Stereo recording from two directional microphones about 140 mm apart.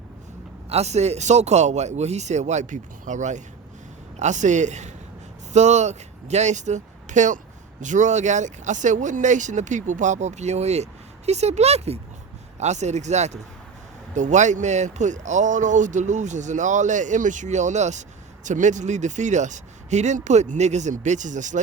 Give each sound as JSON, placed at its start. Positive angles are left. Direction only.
{"t": 0.7, "sound": "speech", "side_deg": -50}